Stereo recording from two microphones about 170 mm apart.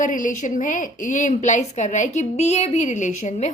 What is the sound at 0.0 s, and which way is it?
A woman's voice, 50° left (ahead or behind).